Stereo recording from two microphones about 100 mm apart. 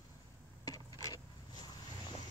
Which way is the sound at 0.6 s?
40° left (ahead or behind).